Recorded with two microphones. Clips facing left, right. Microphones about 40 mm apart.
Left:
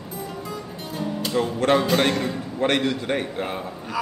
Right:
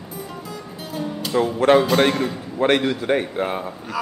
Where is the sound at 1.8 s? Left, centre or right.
Centre.